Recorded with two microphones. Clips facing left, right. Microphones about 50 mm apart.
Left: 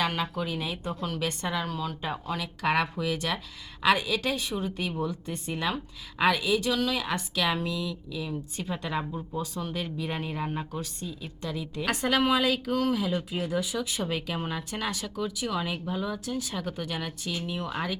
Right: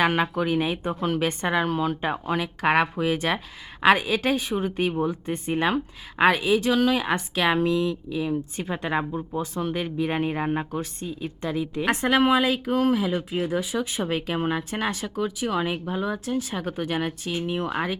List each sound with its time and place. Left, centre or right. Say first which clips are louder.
0.0 s a woman's voice: right 7 dB; right
17.7 s speech: right 5 dB; centre